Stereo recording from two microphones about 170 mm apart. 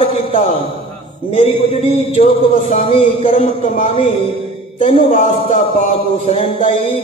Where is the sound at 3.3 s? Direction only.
45° left (ahead or behind).